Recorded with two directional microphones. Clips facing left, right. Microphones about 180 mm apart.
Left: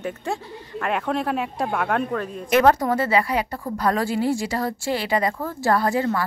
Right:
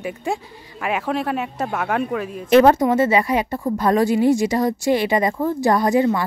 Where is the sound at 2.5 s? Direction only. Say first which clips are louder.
Right 5 dB; 25° right (ahead or behind).